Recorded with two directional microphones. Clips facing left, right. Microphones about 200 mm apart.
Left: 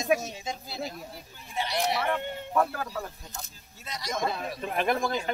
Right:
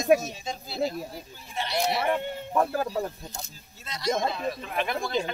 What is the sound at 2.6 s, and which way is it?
Speech, 30° right (ahead or behind).